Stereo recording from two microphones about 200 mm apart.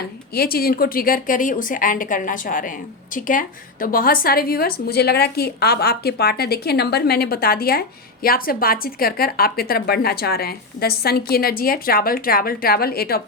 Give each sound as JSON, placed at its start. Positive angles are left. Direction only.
{"t": 0.3, "sound": "a woman's voice", "side_deg": 50}